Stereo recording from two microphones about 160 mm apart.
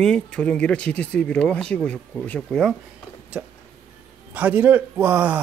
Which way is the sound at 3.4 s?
10° right (ahead or behind).